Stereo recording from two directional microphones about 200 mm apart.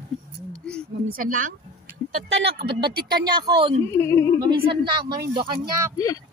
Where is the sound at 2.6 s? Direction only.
55° right (ahead or behind).